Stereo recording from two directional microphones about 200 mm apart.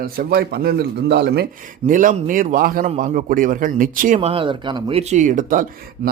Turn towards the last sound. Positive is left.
turn(degrees=-40)  # may be behind; listen again after turning